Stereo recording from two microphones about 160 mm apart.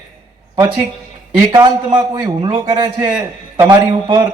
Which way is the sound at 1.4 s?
25° right (ahead or behind).